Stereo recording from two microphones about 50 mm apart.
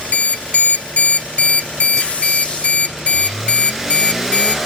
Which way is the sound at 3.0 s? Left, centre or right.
Left.